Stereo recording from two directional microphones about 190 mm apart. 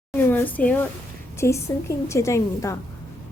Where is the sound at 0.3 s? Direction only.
10° left (ahead or behind).